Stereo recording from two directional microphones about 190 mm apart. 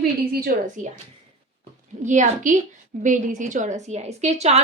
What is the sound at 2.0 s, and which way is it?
Speech, 40° right (ahead or behind).